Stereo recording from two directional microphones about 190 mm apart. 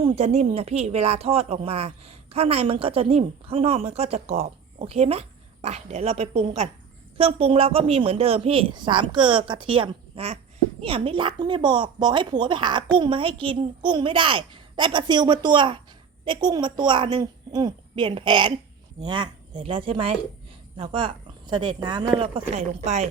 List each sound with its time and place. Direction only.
0.0 s speech: 35° right (ahead or behind)